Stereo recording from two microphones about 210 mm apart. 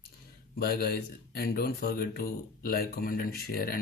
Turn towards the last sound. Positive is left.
turn(degrees=45)  # may be behind; listen again after turning